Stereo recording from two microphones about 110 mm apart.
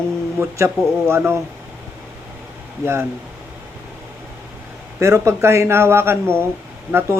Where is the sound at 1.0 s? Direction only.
20° right (ahead or behind).